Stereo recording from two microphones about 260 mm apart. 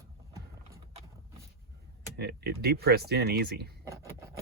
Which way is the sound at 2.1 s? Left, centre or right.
Right.